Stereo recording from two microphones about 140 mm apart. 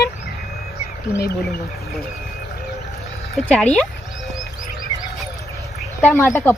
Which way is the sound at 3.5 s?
10° left (ahead or behind).